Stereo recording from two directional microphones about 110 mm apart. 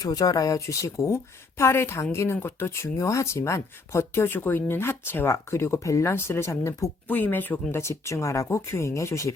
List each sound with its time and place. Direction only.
0.0 s speech: 35° left (ahead or behind)
7.1 s speech: 15° left (ahead or behind)